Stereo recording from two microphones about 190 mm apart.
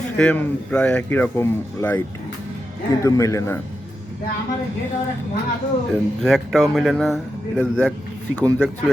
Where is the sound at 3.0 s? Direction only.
15° left (ahead or behind).